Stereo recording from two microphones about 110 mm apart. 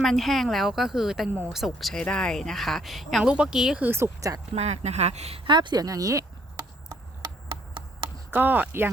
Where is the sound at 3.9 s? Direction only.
25° right (ahead or behind).